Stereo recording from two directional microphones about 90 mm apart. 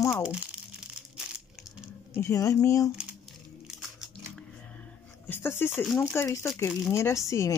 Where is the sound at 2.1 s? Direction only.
35° left (ahead or behind).